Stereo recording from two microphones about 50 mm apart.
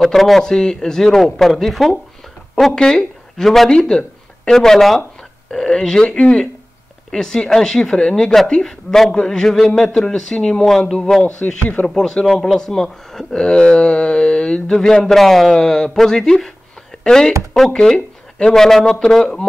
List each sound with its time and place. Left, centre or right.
0.0 s speech: centre
0.4 s speech: centre